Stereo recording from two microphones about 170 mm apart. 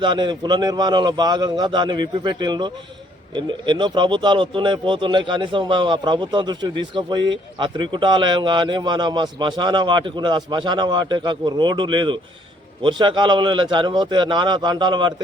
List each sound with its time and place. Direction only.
0.0 s speech: 25° right (ahead or behind)